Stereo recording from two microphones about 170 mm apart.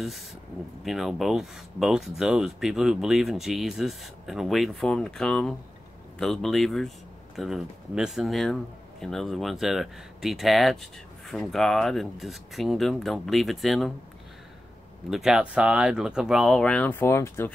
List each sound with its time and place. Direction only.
0.8 s speech: centre (ahead or behind)
15.0 s speech: centre (ahead or behind); by 17.5 s 15° left (ahead or behind)